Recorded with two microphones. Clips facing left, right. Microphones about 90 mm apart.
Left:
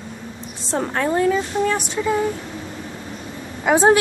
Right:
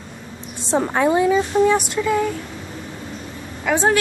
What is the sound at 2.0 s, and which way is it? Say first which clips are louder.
Speech: right 1 dB; 25° left (ahead or behind).